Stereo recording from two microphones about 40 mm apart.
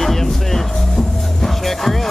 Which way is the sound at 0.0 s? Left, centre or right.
Centre.